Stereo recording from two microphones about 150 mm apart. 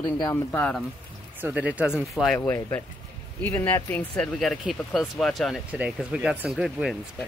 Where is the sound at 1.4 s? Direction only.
10° right (ahead or behind); by 4.3 s 10° left (ahead or behind).